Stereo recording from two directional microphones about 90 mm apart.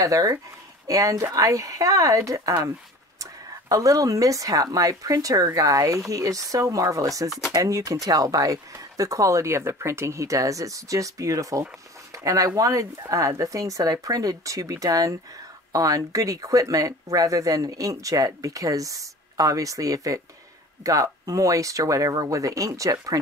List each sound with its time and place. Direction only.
0.0 s speech: 40° right (ahead or behind)